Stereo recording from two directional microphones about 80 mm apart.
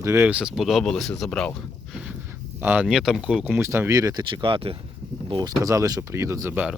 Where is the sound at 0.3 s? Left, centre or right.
Centre.